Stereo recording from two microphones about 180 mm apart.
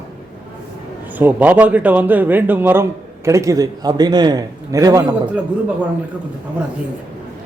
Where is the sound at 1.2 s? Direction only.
10° right (ahead or behind).